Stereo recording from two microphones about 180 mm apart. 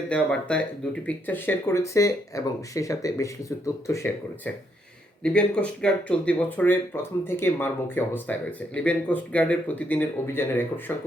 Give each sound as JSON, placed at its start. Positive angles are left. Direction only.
{"t": 0.1, "sound": "speech", "side_deg": 5}